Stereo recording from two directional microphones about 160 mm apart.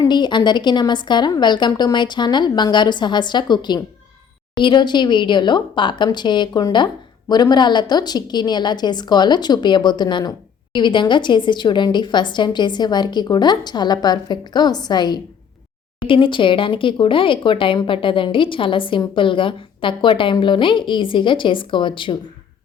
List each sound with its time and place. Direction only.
0.0 s a woman's voice: 30° left (ahead or behind)